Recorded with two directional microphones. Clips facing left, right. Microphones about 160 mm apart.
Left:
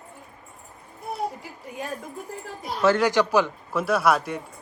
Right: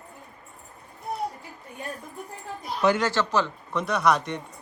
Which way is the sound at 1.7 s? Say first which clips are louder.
Left 6 dB; 90° left.